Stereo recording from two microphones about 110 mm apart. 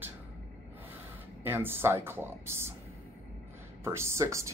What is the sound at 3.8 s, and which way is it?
Speech, 25° right (ahead or behind).